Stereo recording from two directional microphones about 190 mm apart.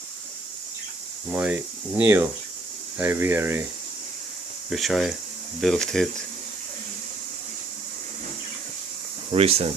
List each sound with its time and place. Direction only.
1.3 s speech: 10° right (ahead or behind)
4.7 s speech: centre (ahead or behind)
9.3 s speech: 30° right (ahead or behind)